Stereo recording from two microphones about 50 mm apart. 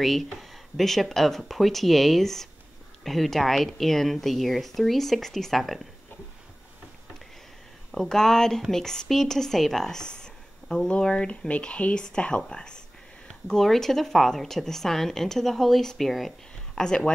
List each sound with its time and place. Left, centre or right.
0.0 s speech: centre
7.9 s speech: centre
16.8 s speech: centre